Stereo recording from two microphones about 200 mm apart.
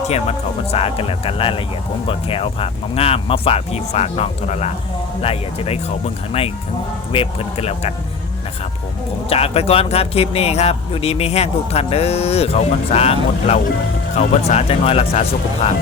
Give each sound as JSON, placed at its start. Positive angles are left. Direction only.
{"t": 0.1, "sound": "speech", "side_deg": 30}
{"t": 7.1, "sound": "speech", "side_deg": 30}
{"t": 9.3, "sound": "speech", "side_deg": 30}